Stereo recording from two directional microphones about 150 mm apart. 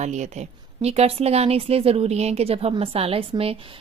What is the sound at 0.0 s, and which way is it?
A woman's voice, 50° right (ahead or behind).